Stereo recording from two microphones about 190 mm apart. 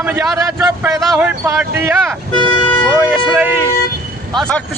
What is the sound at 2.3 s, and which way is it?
Speech, 25° left (ahead or behind).